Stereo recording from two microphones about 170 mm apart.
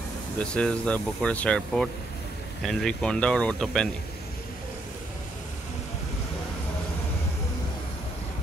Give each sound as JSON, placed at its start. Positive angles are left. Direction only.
{"t": 0.4, "sound": "speech", "side_deg": 5}